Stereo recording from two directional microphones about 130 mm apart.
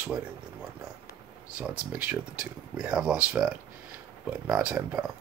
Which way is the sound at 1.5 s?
10° right (ahead or behind).